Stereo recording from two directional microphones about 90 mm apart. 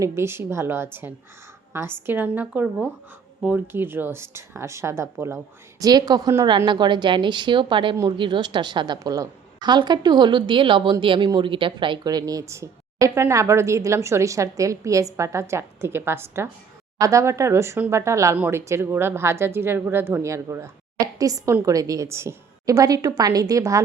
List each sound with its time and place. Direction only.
0.0 s speech: 30° right (ahead or behind)
5.8 s a woman's voice: 45° right (ahead or behind)
6.7 s a woman's voice: 60° right (ahead or behind)
8.2 s a woman's voice: 55° right (ahead or behind)
9.6 s a woman's voice: 55° right (ahead or behind)
12.0 s a woman's voice: 45° right (ahead or behind); by 22.7 s 30° right (ahead or behind)
22.7 s a woman's voice: 40° right (ahead or behind)